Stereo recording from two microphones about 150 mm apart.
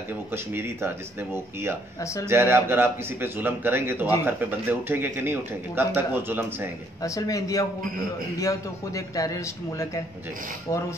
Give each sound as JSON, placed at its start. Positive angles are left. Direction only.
{"t": 0.3, "sound": "speech", "side_deg": -15}
{"t": 2.0, "sound": "speech", "side_deg": 20}
{"t": 2.2, "sound": "speech", "side_deg": -15}
{"t": 7.0, "sound": "speech", "side_deg": 25}